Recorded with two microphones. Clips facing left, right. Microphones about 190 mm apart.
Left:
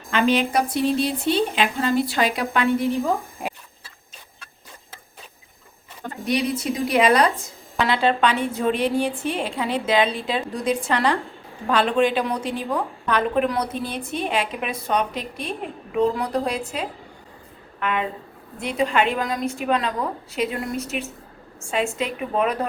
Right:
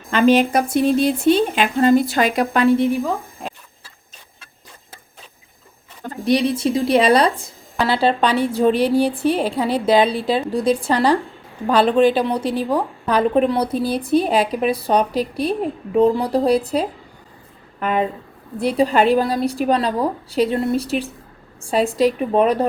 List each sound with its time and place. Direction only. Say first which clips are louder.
0.1 s a woman's voice: right 5 dB; 45° right (ahead or behind)
6.2 s a woman's voice: right 6 dB; 30° right (ahead or behind)